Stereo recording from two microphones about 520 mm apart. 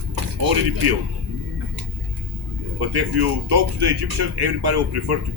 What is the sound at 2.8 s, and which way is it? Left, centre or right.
Speech, right.